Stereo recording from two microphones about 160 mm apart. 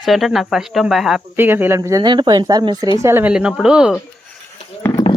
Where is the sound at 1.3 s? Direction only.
10° right (ahead or behind).